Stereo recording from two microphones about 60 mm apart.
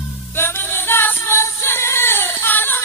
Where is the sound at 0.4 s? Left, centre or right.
Left.